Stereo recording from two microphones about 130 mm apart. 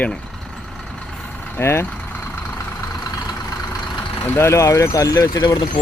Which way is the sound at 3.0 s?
30° left (ahead or behind).